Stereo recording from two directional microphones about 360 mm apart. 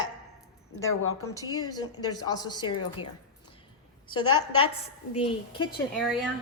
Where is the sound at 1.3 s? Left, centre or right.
Centre.